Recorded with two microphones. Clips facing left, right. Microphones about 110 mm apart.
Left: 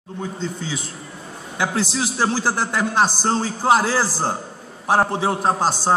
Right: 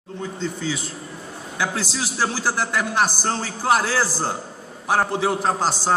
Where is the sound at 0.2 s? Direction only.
20° left (ahead or behind).